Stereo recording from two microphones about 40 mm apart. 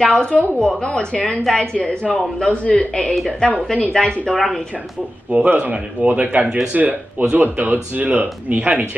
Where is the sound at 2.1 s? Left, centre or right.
Centre.